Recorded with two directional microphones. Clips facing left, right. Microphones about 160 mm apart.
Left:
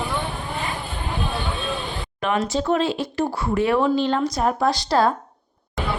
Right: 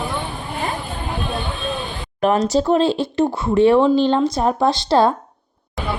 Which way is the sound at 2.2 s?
40° right (ahead or behind).